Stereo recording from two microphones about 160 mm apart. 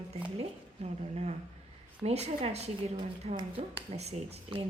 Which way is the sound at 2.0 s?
40° right (ahead or behind).